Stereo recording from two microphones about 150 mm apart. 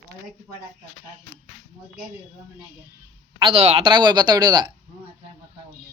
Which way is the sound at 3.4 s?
40° right (ahead or behind).